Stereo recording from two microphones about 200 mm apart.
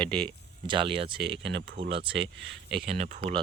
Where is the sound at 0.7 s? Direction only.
25° right (ahead or behind).